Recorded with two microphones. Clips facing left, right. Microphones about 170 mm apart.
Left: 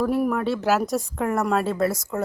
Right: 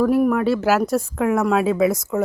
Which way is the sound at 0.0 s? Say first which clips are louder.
Right 5 dB; centre (ahead or behind).